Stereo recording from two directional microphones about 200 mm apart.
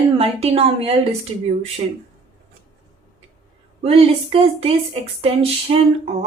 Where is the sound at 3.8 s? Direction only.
30° right (ahead or behind).